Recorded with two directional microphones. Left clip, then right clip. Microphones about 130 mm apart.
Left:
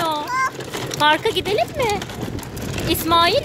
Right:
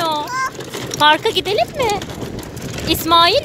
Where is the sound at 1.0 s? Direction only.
25° right (ahead or behind).